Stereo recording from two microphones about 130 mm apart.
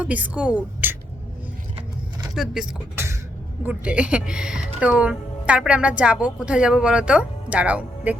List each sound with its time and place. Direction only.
0.0 s speech: 10° right (ahead or behind)
2.3 s speech: 5° right (ahead or behind)
2.9 s cough: 20° right (ahead or behind)
3.6 s speech: 10° right (ahead or behind)